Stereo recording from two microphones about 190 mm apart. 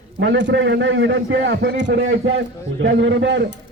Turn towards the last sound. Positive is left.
turn(degrees=-70)  # may be behind; listen again after turning